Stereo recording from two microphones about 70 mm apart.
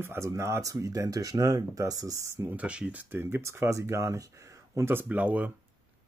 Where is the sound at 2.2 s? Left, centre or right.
Right.